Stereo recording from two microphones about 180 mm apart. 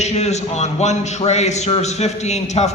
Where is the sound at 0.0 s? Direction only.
40° left (ahead or behind).